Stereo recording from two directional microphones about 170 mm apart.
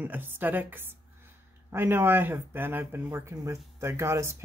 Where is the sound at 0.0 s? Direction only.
10° right (ahead or behind).